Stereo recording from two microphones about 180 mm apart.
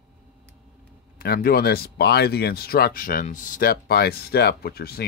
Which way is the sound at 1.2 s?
55° left (ahead or behind).